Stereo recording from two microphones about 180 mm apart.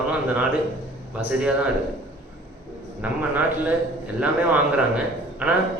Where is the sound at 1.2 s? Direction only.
5° right (ahead or behind).